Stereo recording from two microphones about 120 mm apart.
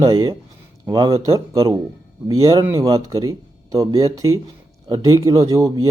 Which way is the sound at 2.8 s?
35° right (ahead or behind).